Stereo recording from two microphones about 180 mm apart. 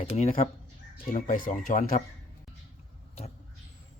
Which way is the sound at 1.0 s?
50° left (ahead or behind).